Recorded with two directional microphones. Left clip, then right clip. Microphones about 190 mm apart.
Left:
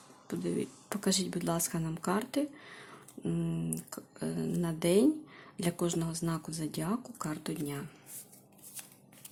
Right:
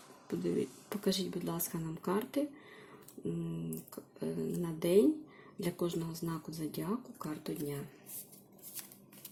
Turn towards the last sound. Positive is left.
turn(degrees=15)  # may be behind; listen again after turning